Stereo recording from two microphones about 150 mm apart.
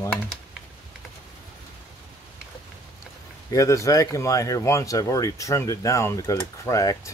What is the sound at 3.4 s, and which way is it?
Speech, 20° left (ahead or behind).